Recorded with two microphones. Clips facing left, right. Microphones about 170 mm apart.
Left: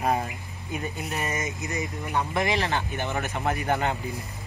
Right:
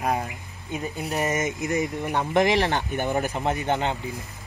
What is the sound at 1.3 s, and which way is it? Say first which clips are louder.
Speech: right 6 dB; 50° right (ahead or behind).